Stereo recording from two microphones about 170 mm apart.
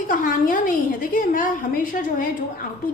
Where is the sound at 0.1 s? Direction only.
55° left (ahead or behind).